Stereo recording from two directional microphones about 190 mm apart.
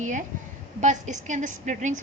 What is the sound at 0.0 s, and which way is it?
A woman's voice, 40° right (ahead or behind).